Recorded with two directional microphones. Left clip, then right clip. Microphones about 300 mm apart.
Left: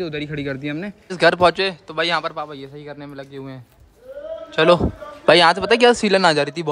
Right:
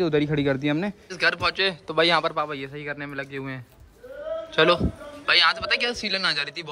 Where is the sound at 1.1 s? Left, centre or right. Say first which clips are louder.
Left 9 dB; centre.